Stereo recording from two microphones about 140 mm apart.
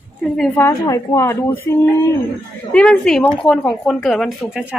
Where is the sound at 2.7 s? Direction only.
5° left (ahead or behind).